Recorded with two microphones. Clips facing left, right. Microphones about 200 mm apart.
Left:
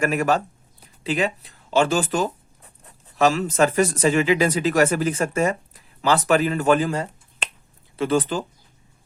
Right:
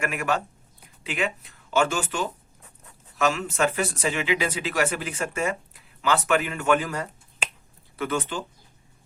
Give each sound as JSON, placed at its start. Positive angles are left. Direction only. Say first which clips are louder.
{"t": 0.0, "sound": "speech", "louder": "left 6 dB", "side_deg": 35}
{"t": 7.4, "sound": "finger snapping", "louder": "even", "side_deg": -5}
{"t": 7.9, "sound": "speech", "louder": "left 7 dB", "side_deg": 30}